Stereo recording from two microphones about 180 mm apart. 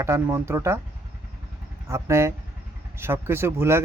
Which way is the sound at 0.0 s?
15° right (ahead or behind).